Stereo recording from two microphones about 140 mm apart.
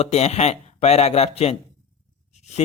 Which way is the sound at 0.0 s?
50° left (ahead or behind).